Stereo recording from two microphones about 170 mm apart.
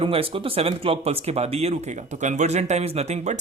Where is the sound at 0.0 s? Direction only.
30° right (ahead or behind).